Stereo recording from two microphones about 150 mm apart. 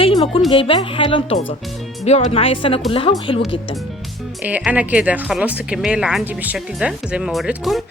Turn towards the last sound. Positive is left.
turn(degrees=0)  # may be behind; listen again after turning